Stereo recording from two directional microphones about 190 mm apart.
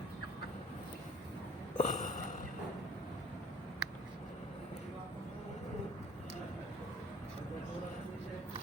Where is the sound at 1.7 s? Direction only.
40° left (ahead or behind).